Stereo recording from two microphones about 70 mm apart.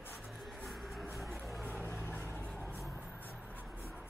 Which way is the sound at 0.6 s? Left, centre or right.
Centre.